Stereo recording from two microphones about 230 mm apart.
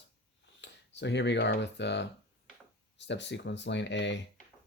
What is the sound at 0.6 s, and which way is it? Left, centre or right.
Speech, left.